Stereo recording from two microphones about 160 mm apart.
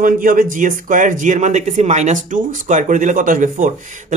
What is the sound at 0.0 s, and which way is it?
A man's voice, 60° right (ahead or behind).